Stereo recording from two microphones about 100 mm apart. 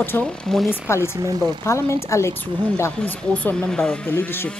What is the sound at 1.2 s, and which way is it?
Speech, 40° right (ahead or behind).